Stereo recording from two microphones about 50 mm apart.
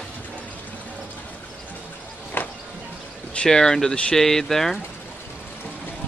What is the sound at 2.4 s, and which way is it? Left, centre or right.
Music, left.